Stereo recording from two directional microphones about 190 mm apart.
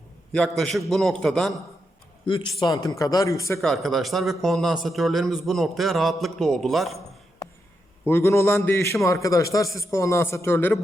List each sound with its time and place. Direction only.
0.3 s a man's voice: centre (ahead or behind)
2.2 s a man's voice: 25° left (ahead or behind)
3.6 s a man's voice: centre (ahead or behind)
8.0 s a man's voice: 10° left (ahead or behind)